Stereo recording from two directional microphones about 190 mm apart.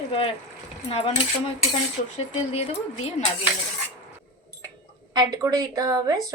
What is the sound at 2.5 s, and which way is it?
Cutlery, 35° left (ahead or behind).